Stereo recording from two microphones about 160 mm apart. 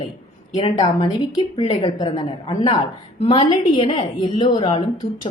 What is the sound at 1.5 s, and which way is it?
A woman's voice, 30° left (ahead or behind).